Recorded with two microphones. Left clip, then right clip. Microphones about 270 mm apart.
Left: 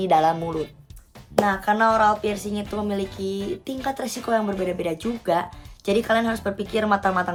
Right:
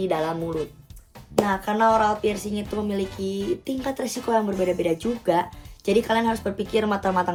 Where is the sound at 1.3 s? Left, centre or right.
Centre.